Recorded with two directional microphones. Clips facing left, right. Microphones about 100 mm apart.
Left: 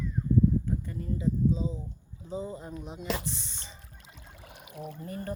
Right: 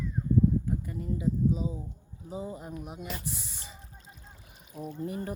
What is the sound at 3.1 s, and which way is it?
Speech, 90° left.